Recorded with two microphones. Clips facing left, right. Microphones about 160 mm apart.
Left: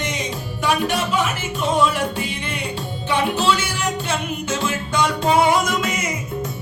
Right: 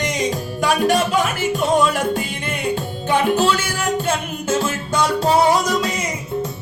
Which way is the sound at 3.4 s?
45° right (ahead or behind).